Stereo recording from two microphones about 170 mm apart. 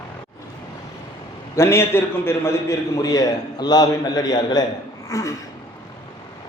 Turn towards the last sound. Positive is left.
turn(degrees=20)  # may be behind; listen again after turning